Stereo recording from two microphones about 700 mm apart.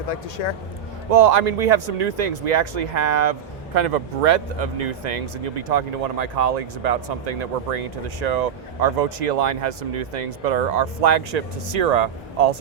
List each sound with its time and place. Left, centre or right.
0.1 s speech: left
1.1 s speech: right
3.8 s speech: right